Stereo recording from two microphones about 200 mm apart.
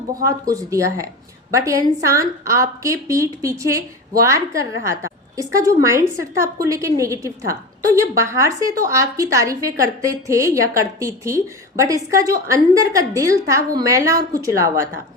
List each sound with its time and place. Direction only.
0.2 s a woman's voice: 15° right (ahead or behind)